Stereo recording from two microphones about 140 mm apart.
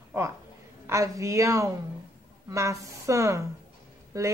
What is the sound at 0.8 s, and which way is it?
A woman's voice, 20° right (ahead or behind).